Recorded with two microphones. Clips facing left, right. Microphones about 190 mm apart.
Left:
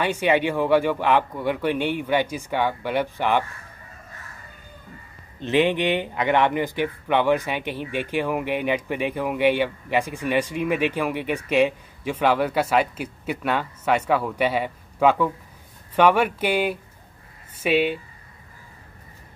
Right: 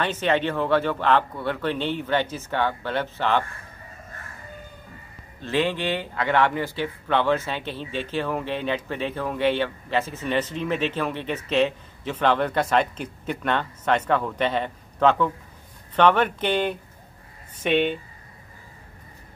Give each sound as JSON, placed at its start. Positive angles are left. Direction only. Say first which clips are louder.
{"t": 0.0, "sound": "speech", "louder": "left 2 dB", "side_deg": 10}
{"t": 5.4, "sound": "speech", "louder": "left 4 dB", "side_deg": 20}